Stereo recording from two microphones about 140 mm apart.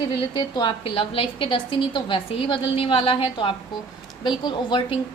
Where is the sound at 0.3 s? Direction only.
35° left (ahead or behind).